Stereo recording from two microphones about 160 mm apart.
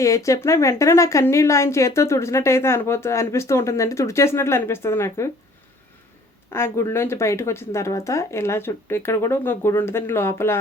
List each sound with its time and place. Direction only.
0.0 s a woman's voice: 20° left (ahead or behind)
6.5 s a woman's voice: 15° left (ahead or behind)